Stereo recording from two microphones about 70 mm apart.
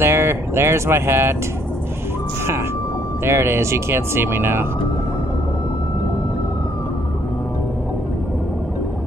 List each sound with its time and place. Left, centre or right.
0.0 s speech: right
3.3 s speech: right